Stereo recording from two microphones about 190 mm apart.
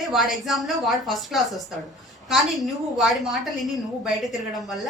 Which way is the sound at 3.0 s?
Centre (ahead or behind).